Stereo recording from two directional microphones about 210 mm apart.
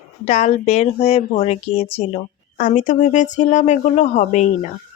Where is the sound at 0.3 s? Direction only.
35° left (ahead or behind).